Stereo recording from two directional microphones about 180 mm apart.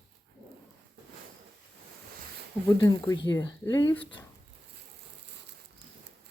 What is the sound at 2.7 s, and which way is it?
Speech, 15° left (ahead or behind).